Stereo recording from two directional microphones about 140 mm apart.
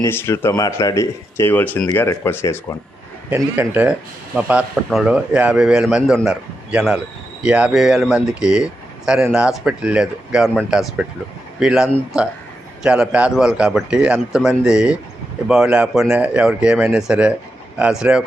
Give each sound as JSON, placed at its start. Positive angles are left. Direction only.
{"t": 0.0, "sound": "speech", "side_deg": 15}
{"t": 3.2, "sound": "a man's voice", "side_deg": -15}